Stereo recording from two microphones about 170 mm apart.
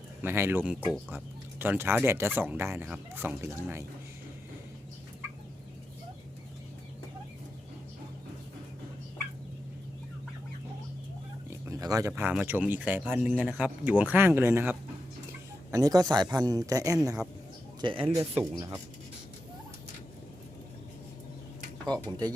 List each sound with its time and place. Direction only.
0.2 s speech: 15° right (ahead or behind)
11.6 s a man's voice: 20° right (ahead or behind)
17.7 s speech: 30° right (ahead or behind)
18.2 s speech: 15° right (ahead or behind)